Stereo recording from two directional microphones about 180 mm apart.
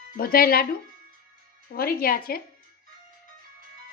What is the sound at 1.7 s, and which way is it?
Speech, 55° left (ahead or behind).